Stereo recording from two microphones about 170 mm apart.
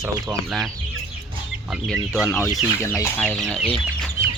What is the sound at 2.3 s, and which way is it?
Chicken, 15° left (ahead or behind).